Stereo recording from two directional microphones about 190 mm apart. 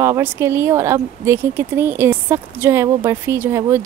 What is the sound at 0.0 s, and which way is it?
Speech, 10° right (ahead or behind).